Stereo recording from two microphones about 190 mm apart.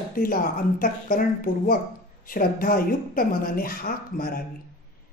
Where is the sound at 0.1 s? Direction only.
50° left (ahead or behind).